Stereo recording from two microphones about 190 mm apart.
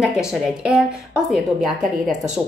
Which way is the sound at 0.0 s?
5° right (ahead or behind).